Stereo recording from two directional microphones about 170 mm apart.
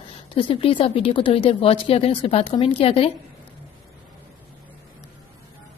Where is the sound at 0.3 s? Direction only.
30° left (ahead or behind).